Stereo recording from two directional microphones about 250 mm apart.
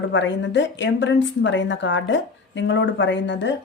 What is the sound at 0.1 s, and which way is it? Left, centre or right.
A woman's voice, left.